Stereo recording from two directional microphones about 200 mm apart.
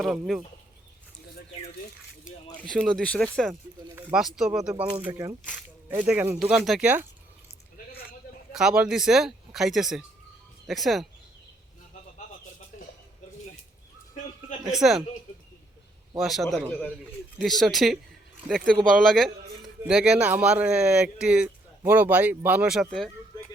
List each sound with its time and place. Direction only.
0.0 s speech: centre (ahead or behind)
2.6 s speech: 5° left (ahead or behind)
4.9 s speech: 15° right (ahead or behind)
8.5 s speech: 5° right (ahead or behind)
14.7 s speech: centre (ahead or behind)
16.1 s speech: centre (ahead or behind)